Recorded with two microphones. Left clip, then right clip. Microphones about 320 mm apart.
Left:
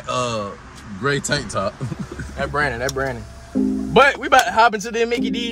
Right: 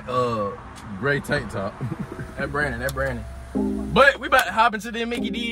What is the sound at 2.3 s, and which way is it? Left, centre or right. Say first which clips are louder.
Speech: left 4 dB; left.